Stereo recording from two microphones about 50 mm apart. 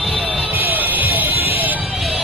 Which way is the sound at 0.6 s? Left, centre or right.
Right.